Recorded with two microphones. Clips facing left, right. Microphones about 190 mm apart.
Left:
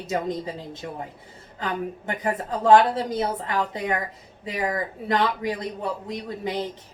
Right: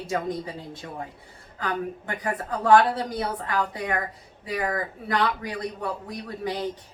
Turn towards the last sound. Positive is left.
turn(degrees=20)  # may be behind; listen again after turning